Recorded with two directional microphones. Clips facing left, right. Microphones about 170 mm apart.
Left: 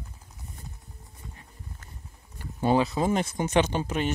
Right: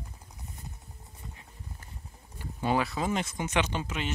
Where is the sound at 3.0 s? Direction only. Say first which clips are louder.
Left 5 dB; 45° left (ahead or behind).